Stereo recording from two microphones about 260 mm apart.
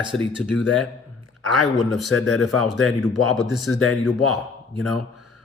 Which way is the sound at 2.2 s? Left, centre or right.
Left.